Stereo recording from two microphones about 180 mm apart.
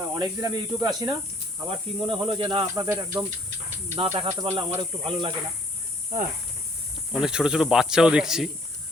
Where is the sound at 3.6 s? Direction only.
40° right (ahead or behind).